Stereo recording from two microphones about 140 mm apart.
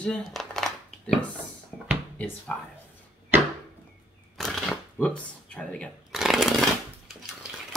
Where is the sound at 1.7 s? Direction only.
10° left (ahead or behind).